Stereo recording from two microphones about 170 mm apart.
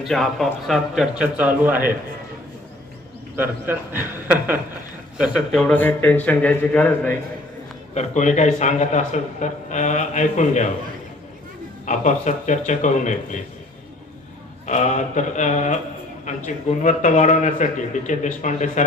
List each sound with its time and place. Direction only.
0.0 s a man's voice: centre (ahead or behind)
3.3 s a man's voice: 10° right (ahead or behind); by 7.1 s 5° left (ahead or behind)
7.9 s a man's voice: 45° left (ahead or behind)
11.9 s a man's voice: 45° left (ahead or behind)
14.7 s a man's voice: 45° left (ahead or behind)